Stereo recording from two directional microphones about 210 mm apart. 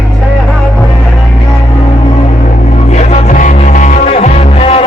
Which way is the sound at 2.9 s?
35° left (ahead or behind).